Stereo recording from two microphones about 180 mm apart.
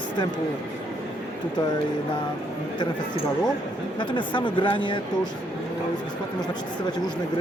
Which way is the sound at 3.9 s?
25° left (ahead or behind).